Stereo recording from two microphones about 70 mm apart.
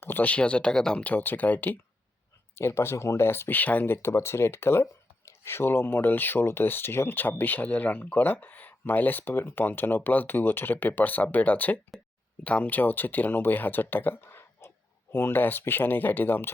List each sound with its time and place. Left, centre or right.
0.0 s speech: left; by 1.0 s centre
1.0 s speech: left
3.9 s speech: left